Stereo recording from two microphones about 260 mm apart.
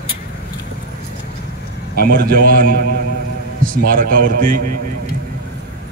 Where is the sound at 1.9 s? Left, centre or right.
Right.